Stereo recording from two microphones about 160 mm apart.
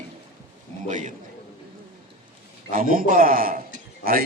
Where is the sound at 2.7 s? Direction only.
60° right (ahead or behind).